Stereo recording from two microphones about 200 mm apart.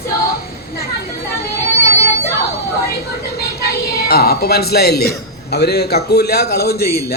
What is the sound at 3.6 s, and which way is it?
A man's voice, 50° left (ahead or behind).